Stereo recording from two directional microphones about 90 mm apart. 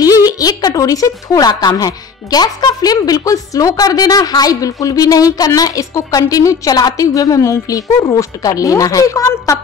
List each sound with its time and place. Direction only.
0.0 s speech: 40° left (ahead or behind)